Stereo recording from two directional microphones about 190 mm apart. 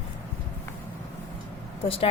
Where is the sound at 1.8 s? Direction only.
30° left (ahead or behind).